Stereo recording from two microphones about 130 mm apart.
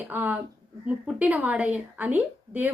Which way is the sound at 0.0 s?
15° right (ahead or behind).